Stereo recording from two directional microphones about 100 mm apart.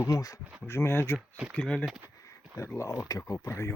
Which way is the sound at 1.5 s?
10° left (ahead or behind).